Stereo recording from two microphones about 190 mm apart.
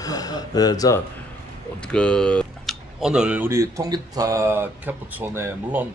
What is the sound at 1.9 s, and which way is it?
Speech, 5° left (ahead or behind).